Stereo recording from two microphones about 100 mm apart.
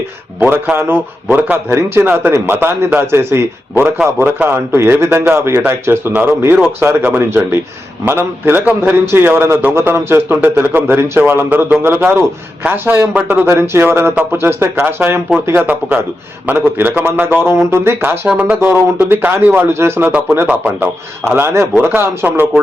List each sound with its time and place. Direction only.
0.3 s a man's voice: 15° right (ahead or behind)
21.3 s a man's voice: 25° right (ahead or behind)